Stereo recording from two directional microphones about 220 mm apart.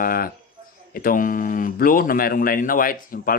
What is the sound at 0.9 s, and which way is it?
Speech, 40° left (ahead or behind).